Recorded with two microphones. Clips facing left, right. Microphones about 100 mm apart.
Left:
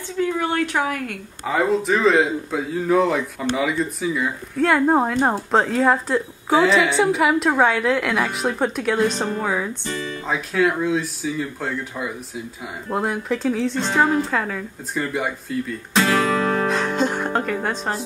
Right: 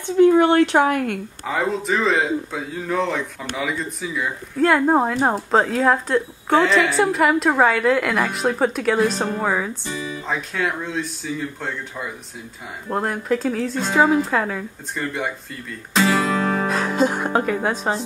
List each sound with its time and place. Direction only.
0.4 s speech: 60° right (ahead or behind)
0.8 s speech: 35° right (ahead or behind)
1.4 s speech: centre (ahead or behind)
15.9 s music: centre (ahead or behind)